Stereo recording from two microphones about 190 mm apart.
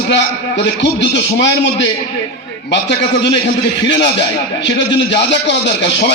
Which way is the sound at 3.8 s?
65° left (ahead or behind).